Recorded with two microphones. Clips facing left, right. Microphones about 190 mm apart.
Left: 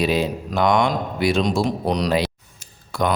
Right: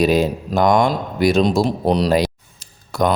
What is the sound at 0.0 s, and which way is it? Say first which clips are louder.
A man's voice: right 5 dB; 45° right (ahead or behind).